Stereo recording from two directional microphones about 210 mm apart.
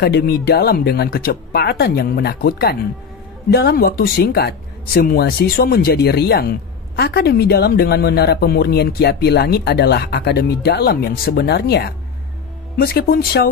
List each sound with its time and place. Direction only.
0.0 s speech: 50° left (ahead or behind)